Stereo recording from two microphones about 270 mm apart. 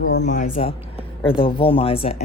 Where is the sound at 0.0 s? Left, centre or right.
Left.